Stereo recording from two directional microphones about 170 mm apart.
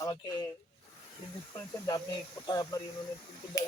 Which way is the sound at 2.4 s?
20° left (ahead or behind).